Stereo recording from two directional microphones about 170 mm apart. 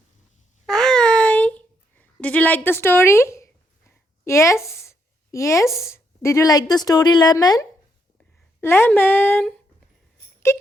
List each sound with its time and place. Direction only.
0.6 s babbling: 5° left (ahead or behind)
5.7 s a woman's voice: 15° left (ahead or behind)
10.5 s wail: 15° left (ahead or behind)